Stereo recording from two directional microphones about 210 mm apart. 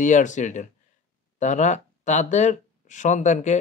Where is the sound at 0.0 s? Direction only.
35° left (ahead or behind).